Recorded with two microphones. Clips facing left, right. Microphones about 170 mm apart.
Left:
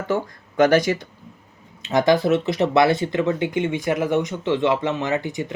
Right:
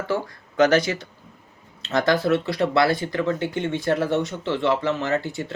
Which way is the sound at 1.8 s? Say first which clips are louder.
Left 3 dB; 15° left (ahead or behind).